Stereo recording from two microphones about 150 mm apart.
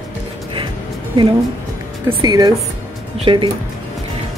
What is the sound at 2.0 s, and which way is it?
Speech, 25° right (ahead or behind).